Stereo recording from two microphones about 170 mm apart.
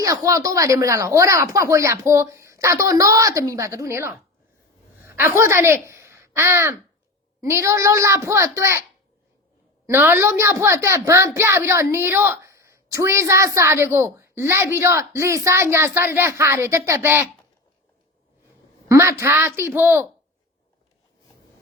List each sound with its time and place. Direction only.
0.0 s a woman's voice: 20° right (ahead or behind)
9.8 s a woman's voice: 10° right (ahead or behind)
18.9 s a woman's voice: 15° right (ahead or behind)